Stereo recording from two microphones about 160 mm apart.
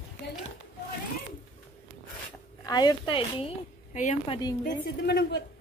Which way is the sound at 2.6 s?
25° left (ahead or behind).